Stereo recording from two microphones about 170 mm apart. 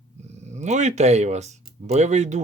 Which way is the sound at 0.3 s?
45° right (ahead or behind).